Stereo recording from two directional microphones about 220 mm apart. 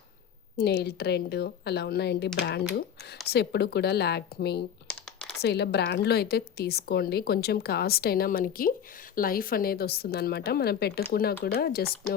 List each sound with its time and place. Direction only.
0.5 s a woman's voice: 45° left (ahead or behind)